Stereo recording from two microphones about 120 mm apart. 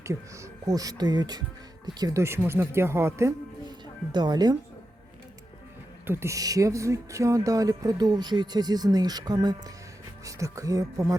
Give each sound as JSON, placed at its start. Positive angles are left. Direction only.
{"t": 0.6, "sound": "speech", "side_deg": -30}
{"t": 4.1, "sound": "speech", "side_deg": -35}
{"t": 6.1, "sound": "speech", "side_deg": -20}